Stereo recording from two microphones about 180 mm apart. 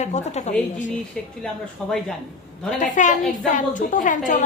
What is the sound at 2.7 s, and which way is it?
A woman's voice, 45° left (ahead or behind).